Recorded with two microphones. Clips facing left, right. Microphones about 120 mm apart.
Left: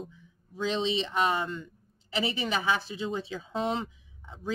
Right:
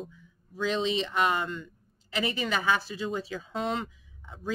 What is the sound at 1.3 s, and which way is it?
A woman's voice, 25° left (ahead or behind).